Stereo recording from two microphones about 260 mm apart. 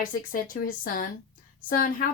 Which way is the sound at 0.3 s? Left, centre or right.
Left.